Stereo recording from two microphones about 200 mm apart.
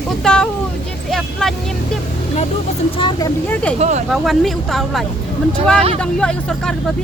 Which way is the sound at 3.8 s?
35° right (ahead or behind).